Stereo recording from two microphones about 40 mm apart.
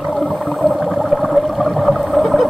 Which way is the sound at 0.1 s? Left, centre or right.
Centre.